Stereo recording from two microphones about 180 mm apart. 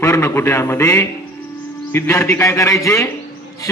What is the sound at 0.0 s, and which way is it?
A man's voice, 15° left (ahead or behind).